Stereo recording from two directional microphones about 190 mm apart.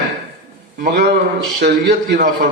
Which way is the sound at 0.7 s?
55° right (ahead or behind).